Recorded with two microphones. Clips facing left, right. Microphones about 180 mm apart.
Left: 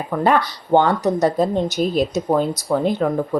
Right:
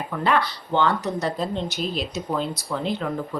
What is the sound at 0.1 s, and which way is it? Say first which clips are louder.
Speech: left 5 dB; 45° left (ahead or behind).